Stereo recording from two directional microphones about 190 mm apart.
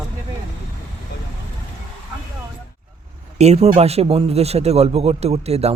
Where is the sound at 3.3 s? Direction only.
35° right (ahead or behind).